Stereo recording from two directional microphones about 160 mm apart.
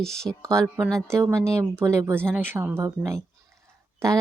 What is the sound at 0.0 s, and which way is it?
Speech, 5° left (ahead or behind).